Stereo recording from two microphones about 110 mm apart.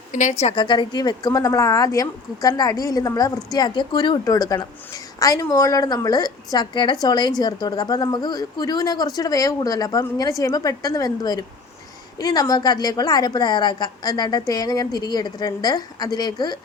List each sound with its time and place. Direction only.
0.3 s a woman's voice: 90° left
0.5 s speech: 45° left (ahead or behind)